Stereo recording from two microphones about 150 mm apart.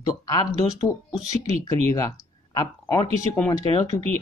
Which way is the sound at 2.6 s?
25° left (ahead or behind).